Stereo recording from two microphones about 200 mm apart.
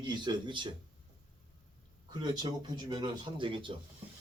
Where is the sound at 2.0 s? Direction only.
20° right (ahead or behind).